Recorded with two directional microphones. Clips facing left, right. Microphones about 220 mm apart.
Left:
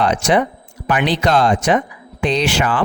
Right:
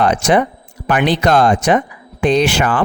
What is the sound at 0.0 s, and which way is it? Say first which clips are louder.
Speech: right 2 dB; 50° right (ahead or behind).